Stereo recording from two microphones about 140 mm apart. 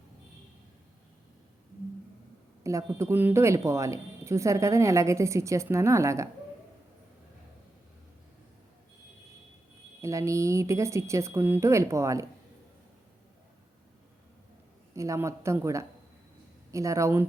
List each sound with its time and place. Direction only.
2.6 s speech: 20° right (ahead or behind)
10.0 s speech: 20° right (ahead or behind)
14.9 s speech: 20° right (ahead or behind)